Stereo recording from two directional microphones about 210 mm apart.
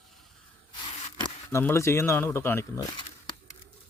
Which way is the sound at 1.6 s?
10° left (ahead or behind).